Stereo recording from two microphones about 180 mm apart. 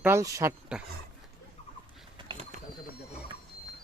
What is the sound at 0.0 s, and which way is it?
Speech, 15° right (ahead or behind).